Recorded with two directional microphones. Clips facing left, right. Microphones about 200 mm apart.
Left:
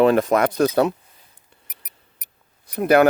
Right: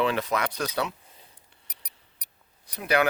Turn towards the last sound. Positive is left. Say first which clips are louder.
# left 9 dB
turn(degrees=50)  # may be behind; listen again after turning